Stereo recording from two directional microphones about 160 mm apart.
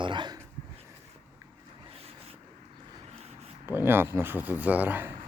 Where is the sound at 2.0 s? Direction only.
40° right (ahead or behind).